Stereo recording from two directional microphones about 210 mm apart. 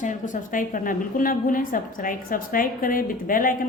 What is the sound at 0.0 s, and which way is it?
A woman's voice, 40° left (ahead or behind).